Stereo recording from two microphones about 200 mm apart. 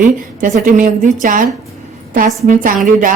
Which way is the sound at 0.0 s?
40° right (ahead or behind).